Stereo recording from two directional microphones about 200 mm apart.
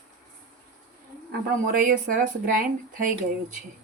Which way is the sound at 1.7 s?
40° right (ahead or behind).